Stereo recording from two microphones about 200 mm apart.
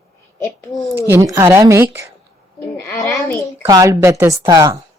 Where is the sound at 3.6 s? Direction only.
15° right (ahead or behind).